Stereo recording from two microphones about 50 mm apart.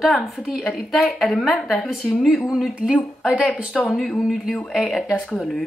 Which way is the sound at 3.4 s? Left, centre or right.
Left.